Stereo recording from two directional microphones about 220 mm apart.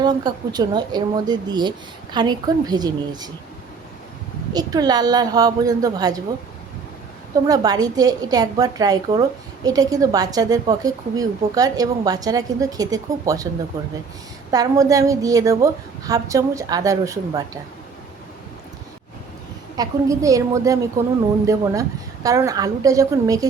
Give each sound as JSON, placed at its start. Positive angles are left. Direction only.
{"t": 0.0, "sound": "speech", "side_deg": -20}
{"t": 4.5, "sound": "a woman's voice", "side_deg": -15}
{"t": 7.4, "sound": "a woman's voice", "side_deg": -15}
{"t": 14.5, "sound": "a woman's voice", "side_deg": -15}
{"t": 19.7, "sound": "a woman's voice", "side_deg": -15}